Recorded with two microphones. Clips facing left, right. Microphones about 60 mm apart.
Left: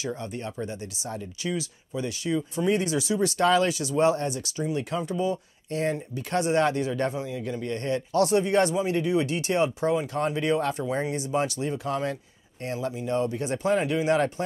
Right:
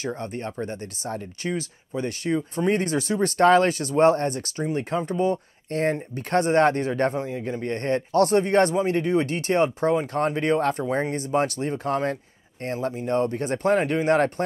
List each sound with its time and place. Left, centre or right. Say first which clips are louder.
0.0 s speech: right 2 dB; right